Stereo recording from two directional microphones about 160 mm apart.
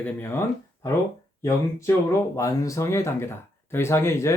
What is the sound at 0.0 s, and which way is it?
Speech, 15° left (ahead or behind).